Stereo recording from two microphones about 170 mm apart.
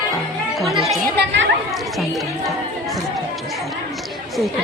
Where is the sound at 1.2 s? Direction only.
90° right.